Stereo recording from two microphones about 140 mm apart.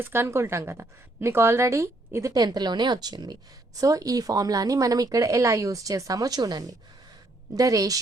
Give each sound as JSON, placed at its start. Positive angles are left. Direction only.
{"t": 0.0, "sound": "speech", "side_deg": -15}